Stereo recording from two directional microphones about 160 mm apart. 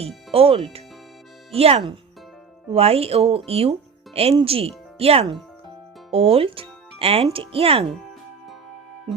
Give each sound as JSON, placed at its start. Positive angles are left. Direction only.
{"t": 0.3, "sound": "speech", "side_deg": -35}